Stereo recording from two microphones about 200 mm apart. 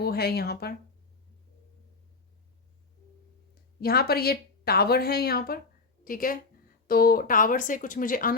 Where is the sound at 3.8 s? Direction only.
50° left (ahead or behind).